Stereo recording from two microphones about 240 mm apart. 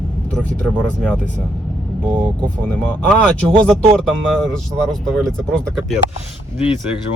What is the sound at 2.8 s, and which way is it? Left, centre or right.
Speech, centre.